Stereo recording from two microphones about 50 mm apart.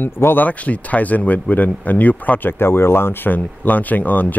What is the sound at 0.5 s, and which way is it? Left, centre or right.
Speech, left.